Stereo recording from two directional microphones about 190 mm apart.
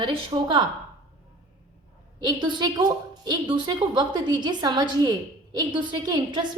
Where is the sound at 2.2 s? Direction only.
25° right (ahead or behind).